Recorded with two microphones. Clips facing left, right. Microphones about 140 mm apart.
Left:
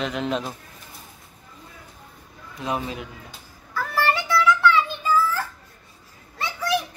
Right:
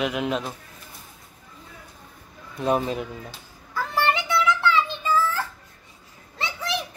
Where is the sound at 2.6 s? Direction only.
40° right (ahead or behind).